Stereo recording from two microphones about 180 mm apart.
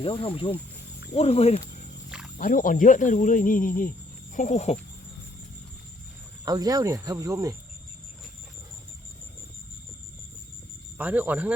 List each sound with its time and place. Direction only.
0.0 s speech: 30° left (ahead or behind)
2.0 s wild animals: 5° right (ahead or behind)
2.4 s speech: 50° left (ahead or behind)
6.4 s speech: 20° right (ahead or behind)
10.9 s speech: 10° right (ahead or behind)